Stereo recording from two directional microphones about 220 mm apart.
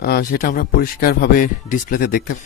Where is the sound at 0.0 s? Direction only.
45° left (ahead or behind).